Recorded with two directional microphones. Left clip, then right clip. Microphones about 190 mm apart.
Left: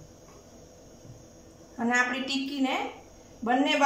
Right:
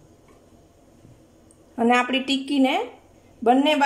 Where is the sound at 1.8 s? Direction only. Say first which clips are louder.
Right 6 dB; 60° right (ahead or behind).